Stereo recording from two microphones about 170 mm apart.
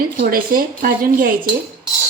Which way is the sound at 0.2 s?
55° right (ahead or behind).